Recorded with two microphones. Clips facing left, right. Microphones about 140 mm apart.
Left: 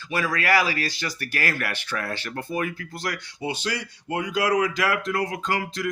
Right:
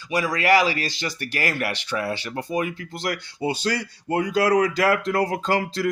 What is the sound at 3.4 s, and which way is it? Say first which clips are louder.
Speech: right 4 dB; 40° right (ahead or behind).